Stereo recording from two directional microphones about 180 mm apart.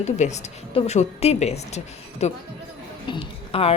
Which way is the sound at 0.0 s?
40° left (ahead or behind).